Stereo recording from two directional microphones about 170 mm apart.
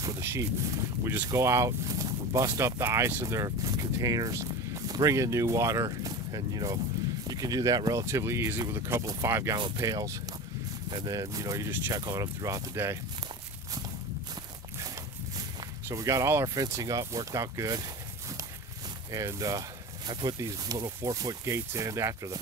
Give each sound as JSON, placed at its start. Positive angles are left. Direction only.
{"t": 0.0, "sound": "speech", "side_deg": -15}
{"t": 15.9, "sound": "speech", "side_deg": -20}
{"t": 19.1, "sound": "speech", "side_deg": -20}